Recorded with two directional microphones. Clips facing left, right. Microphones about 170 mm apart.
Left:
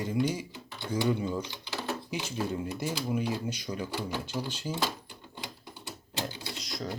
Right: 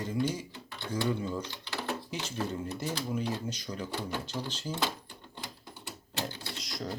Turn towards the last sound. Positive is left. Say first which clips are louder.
# left 1 dB
turn(degrees=0)  # may be behind; listen again after turning